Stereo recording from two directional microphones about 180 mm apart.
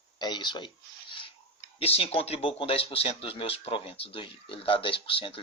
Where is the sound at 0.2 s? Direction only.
25° left (ahead or behind).